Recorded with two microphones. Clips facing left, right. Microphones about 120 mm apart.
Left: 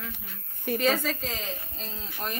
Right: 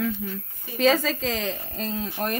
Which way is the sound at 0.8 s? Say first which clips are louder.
Right 7 dB; 90° right.